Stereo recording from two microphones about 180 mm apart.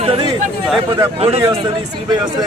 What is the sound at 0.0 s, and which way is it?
A man's voice, 35° right (ahead or behind).